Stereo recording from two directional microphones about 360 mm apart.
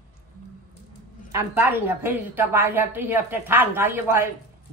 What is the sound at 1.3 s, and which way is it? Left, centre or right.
A woman's voice, centre.